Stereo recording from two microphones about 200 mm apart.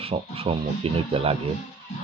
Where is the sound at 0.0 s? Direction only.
30° right (ahead or behind).